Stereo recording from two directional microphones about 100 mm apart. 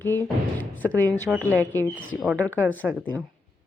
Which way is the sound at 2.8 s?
15° right (ahead or behind).